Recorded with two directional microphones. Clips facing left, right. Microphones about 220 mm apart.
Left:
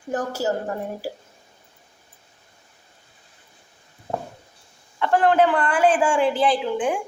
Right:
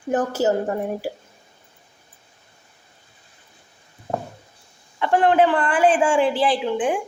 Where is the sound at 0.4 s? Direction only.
20° right (ahead or behind).